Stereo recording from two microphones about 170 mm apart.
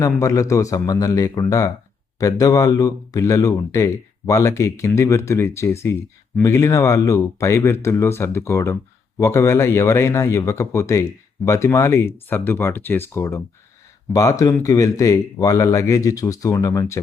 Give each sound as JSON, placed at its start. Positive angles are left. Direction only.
{"t": 0.0, "sound": "speech", "side_deg": 20}